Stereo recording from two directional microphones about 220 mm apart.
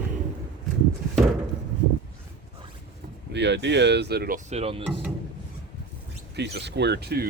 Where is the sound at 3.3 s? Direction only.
50° right (ahead or behind).